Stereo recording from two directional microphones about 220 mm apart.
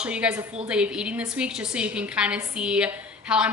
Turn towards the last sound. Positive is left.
turn(degrees=-5)  # may be behind; listen again after turning